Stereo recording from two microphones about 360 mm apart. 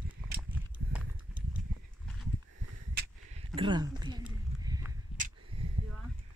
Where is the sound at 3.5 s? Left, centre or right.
Centre.